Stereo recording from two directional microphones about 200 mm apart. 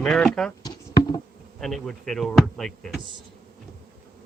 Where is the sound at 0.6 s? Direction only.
20° left (ahead or behind).